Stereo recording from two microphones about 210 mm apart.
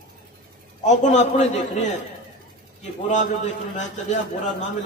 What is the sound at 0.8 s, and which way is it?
Speech, 35° left (ahead or behind).